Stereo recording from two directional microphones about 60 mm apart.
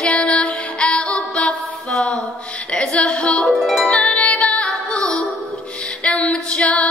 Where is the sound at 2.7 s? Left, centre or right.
Centre.